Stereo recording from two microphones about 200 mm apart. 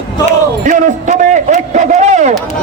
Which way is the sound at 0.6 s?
40° right (ahead or behind).